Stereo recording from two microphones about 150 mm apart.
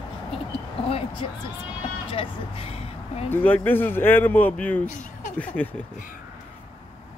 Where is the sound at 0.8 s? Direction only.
40° left (ahead or behind).